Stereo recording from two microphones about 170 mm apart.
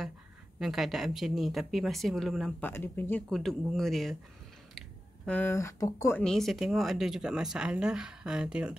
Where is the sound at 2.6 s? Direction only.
10° left (ahead or behind).